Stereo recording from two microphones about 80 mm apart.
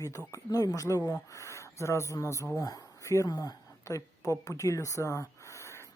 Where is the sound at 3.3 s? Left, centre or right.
Left.